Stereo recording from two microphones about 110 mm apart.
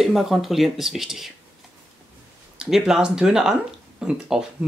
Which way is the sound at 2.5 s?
5° right (ahead or behind).